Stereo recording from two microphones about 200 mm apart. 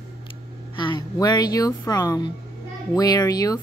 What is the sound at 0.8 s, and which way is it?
A woman's voice, 20° left (ahead or behind).